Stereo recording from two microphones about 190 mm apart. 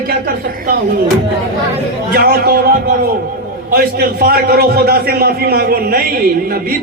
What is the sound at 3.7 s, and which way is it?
A man's voice, 55° right (ahead or behind).